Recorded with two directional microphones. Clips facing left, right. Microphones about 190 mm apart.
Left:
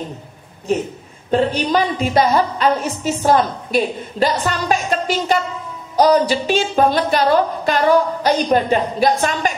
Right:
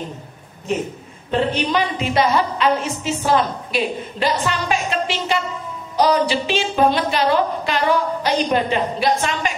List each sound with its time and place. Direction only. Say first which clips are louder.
1.3 s a woman's voice: left 3 dB; 40° left (ahead or behind)